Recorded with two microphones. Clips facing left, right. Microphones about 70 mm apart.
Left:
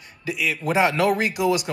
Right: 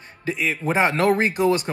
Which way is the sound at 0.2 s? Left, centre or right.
Right.